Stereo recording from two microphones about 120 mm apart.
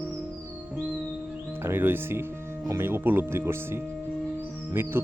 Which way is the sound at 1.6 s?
20° right (ahead or behind).